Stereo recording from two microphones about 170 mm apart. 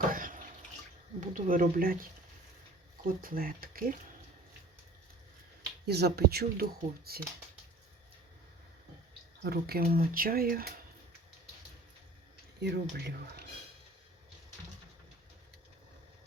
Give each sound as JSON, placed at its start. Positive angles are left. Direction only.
{"t": 0.1, "sound": "water", "side_deg": -55}
{"t": 1.2, "sound": "speech", "side_deg": -50}
{"t": 3.2, "sound": "speech", "side_deg": -60}
{"t": 5.8, "sound": "speech", "side_deg": -70}
{"t": 9.4, "sound": "speech", "side_deg": -65}
{"t": 12.5, "sound": "speech", "side_deg": -80}